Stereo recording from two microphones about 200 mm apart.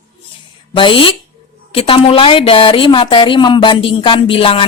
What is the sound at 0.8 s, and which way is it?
A woman's voice, 25° left (ahead or behind).